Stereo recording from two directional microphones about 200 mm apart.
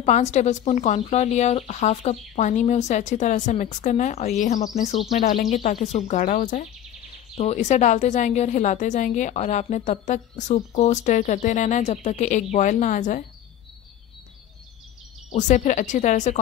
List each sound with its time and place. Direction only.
0.0 s a woman's voice: 35° left (ahead or behind)
15.3 s a woman's voice: 35° left (ahead or behind)